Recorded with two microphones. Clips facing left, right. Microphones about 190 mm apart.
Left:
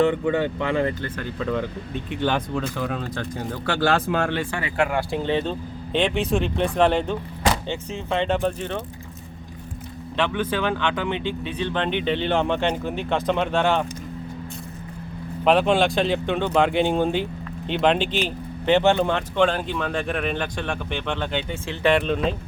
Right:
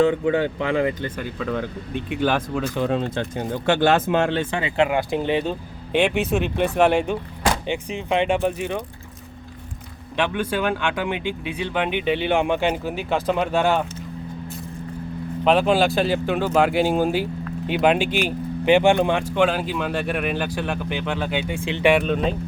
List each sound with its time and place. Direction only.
0.1 s speech: 15° right (ahead or behind)
2.7 s speech: 25° right (ahead or behind)
10.2 s speech: 15° right (ahead or behind)
15.4 s speech: centre (ahead or behind)
21.9 s speech: 5° right (ahead or behind)